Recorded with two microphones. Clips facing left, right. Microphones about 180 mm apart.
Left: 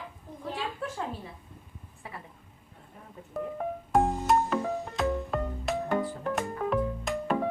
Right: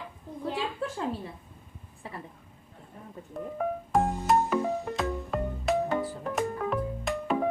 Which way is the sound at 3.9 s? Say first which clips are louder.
Left 1 dB; centre (ahead or behind).